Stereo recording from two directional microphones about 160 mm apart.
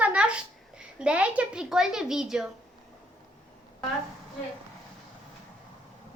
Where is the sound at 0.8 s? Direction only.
5° right (ahead or behind).